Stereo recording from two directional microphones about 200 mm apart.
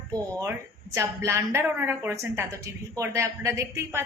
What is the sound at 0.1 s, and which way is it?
A woman's voice, 20° right (ahead or behind).